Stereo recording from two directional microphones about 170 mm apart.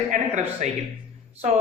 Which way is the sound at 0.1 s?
45° right (ahead or behind).